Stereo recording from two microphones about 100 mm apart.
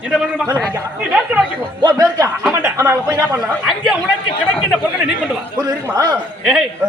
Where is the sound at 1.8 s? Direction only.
40° right (ahead or behind).